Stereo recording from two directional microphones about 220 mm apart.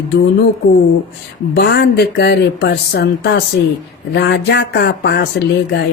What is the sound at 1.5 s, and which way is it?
A woman's voice, 50° left (ahead or behind).